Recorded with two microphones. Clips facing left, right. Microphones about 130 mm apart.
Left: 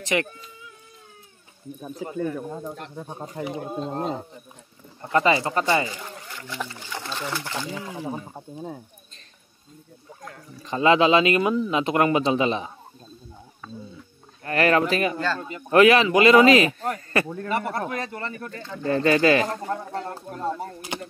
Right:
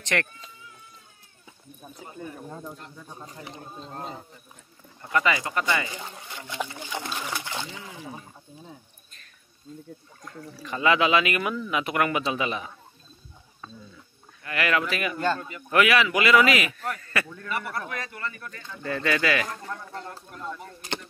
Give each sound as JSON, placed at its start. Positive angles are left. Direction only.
{"t": 0.1, "sound": "speech", "side_deg": 5}
{"t": 2.0, "sound": "speech", "side_deg": 90}
{"t": 3.6, "sound": "speech", "side_deg": 75}
{"t": 5.1, "sound": "a man's voice", "side_deg": 30}
{"t": 6.3, "sound": "speech", "side_deg": -15}
{"t": 8.0, "sound": "speech", "side_deg": 45}
{"t": 10.6, "sound": "speech", "side_deg": 30}
{"t": 14.4, "sound": "a man's voice", "side_deg": 35}
{"t": 15.1, "sound": "speech", "side_deg": -20}
{"t": 15.4, "sound": "a man's voice", "side_deg": 30}